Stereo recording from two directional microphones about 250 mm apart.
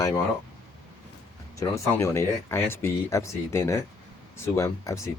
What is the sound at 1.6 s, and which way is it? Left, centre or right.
Speech, centre.